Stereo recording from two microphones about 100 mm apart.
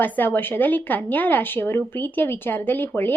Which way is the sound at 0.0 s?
20° left (ahead or behind).